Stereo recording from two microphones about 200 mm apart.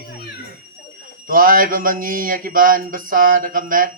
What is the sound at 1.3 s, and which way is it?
Speech, 45° right (ahead or behind).